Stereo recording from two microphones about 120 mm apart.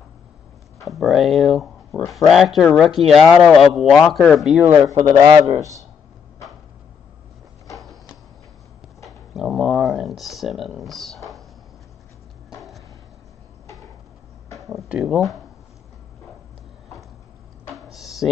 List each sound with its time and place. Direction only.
0.7 s speech: centre (ahead or behind)
4.6 s a man's voice: 25° right (ahead or behind)
9.0 s speech: centre (ahead or behind)
14.9 s speech: 5° right (ahead or behind)
17.9 s music: centre (ahead or behind)